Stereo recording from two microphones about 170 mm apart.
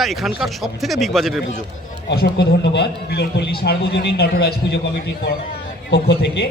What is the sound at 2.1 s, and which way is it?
A man's voice, 70° left (ahead or behind).